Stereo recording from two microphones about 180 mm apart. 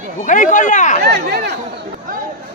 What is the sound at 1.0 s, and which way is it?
Speech, 65° right (ahead or behind).